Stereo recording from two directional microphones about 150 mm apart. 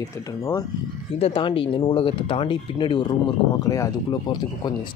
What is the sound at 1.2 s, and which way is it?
Speech, 35° left (ahead or behind).